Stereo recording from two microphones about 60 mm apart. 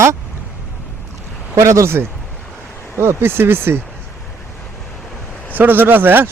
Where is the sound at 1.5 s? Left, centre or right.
Right.